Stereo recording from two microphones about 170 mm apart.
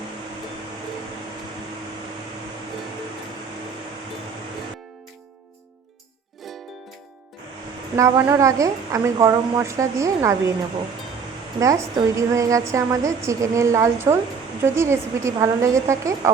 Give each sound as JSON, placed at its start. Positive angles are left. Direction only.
{"t": 7.9, "sound": "a woman's voice", "side_deg": -20}
{"t": 11.6, "sound": "a woman's voice", "side_deg": -20}